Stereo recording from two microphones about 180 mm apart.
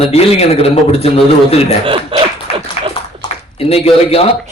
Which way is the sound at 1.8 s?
30° right (ahead or behind).